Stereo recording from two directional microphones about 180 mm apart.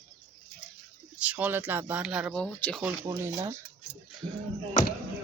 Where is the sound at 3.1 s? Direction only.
15° right (ahead or behind).